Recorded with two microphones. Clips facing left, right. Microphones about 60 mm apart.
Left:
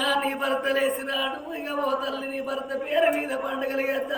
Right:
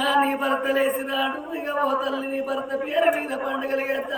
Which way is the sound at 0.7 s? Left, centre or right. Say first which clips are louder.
Right 2 dB; centre.